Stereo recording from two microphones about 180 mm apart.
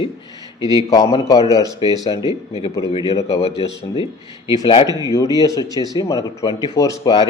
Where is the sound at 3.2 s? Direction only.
35° left (ahead or behind).